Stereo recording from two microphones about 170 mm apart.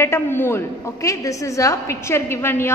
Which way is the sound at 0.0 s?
15° left (ahead or behind).